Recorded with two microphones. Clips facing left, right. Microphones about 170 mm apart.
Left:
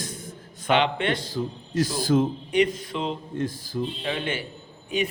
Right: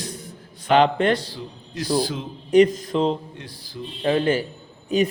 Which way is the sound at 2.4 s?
40° right (ahead or behind).